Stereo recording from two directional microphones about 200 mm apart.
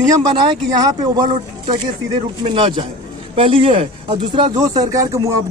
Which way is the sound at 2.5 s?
25° right (ahead or behind).